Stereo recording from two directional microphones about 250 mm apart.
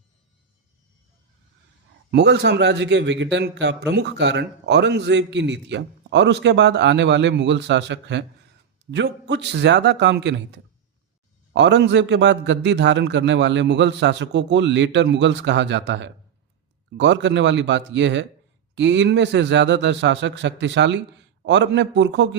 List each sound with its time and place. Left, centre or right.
2.0 s a man's voice: right